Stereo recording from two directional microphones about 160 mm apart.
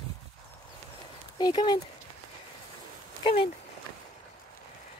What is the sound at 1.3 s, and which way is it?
Speech, 25° left (ahead or behind).